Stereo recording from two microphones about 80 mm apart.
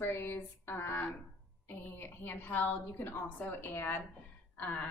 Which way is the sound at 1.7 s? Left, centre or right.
Left.